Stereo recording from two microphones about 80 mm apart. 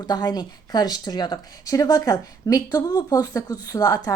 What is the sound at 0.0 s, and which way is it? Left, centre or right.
Speech, left.